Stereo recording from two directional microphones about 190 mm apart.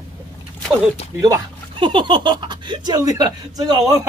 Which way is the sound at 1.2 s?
20° right (ahead or behind).